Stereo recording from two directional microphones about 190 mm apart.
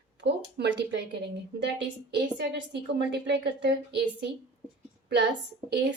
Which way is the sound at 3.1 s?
65° right (ahead or behind).